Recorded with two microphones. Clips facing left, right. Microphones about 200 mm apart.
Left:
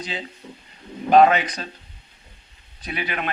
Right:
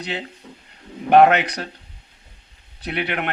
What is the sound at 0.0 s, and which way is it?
Speech, 65° right (ahead or behind).